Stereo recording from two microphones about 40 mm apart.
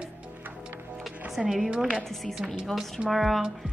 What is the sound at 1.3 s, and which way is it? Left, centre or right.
Speech, centre.